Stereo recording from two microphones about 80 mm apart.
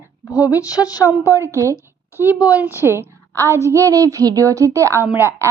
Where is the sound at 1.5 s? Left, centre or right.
Right.